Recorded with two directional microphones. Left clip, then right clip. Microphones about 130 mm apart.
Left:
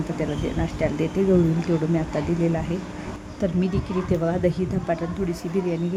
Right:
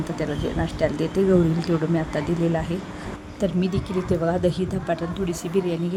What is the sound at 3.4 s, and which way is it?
Speech, 25° right (ahead or behind).